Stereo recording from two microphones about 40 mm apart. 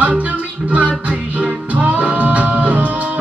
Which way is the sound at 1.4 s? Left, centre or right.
Right.